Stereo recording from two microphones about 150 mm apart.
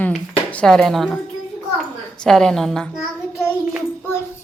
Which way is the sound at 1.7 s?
5° left (ahead or behind).